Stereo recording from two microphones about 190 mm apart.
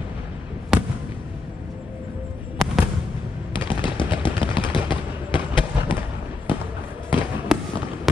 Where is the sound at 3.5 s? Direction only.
25° left (ahead or behind).